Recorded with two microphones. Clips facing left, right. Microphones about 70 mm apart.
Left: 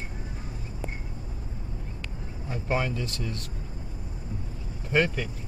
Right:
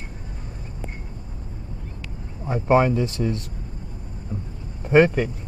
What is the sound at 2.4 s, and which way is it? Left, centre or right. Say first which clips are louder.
Speech: right 11 dB; right.